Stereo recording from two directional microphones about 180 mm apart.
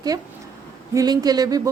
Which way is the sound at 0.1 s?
20° right (ahead or behind).